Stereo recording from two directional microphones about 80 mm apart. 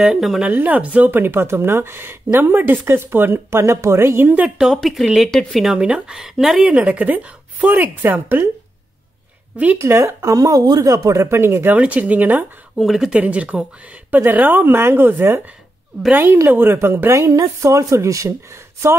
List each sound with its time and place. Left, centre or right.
0.0 s speech: centre
0.4 s speech: right
4.7 s speech: centre
6.6 s speech: centre
9.8 s speech: right
12.7 s speech: centre
13.1 s speech: centre
17.2 s speech: right